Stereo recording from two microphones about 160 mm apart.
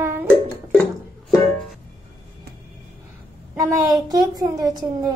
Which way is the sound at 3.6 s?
20° right (ahead or behind).